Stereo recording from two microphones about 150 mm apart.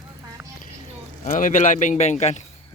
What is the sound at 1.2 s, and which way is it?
A man's voice, 60° left (ahead or behind).